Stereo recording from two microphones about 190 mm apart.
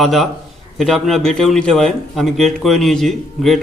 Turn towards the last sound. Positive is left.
turn(degrees=0)  # may be behind; listen again after turning